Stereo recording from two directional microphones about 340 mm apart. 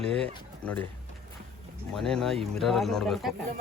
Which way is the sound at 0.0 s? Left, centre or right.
Centre.